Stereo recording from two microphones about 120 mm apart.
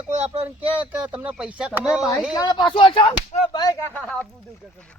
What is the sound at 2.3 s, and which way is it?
Speech, 35° left (ahead or behind).